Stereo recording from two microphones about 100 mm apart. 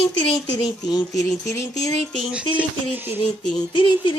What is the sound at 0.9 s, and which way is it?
Speech, 40° left (ahead or behind).